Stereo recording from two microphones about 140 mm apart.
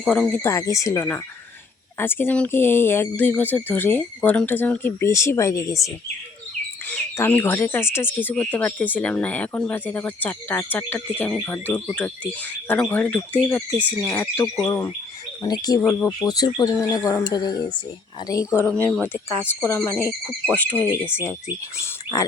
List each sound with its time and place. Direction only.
0.1 s speech: 10° left (ahead or behind)
0.4 s speech: 20° left (ahead or behind)
6.8 s speech: 10° left (ahead or behind)
18.7 s speech: 10° left (ahead or behind)